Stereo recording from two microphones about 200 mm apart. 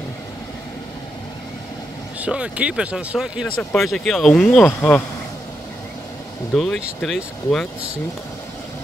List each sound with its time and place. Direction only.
2.1 s speech: 5° right (ahead or behind)
6.5 s speech: 5° left (ahead or behind)